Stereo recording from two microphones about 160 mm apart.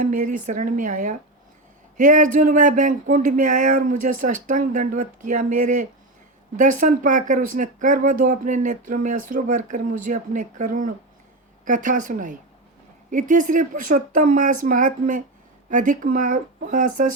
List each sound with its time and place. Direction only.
0.0 s speech: 55° right (ahead or behind)